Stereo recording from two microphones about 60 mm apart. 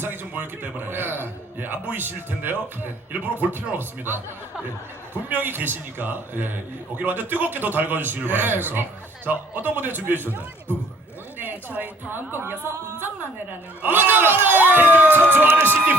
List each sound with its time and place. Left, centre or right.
0.0 s a man's voice: right
5.3 s a man's voice: right